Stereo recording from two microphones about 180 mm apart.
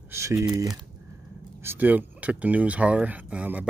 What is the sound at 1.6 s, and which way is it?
Speech, 10° right (ahead or behind).